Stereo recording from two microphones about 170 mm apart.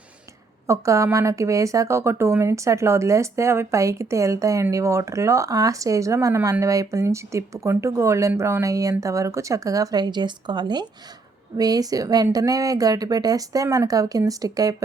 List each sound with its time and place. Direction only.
0.7 s a woman's voice: 15° right (ahead or behind)